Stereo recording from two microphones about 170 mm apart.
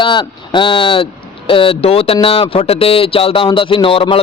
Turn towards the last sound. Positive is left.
turn(degrees=30)  # may be behind; listen again after turning